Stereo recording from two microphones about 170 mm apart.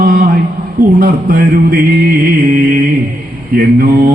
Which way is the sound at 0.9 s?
55° right (ahead or behind).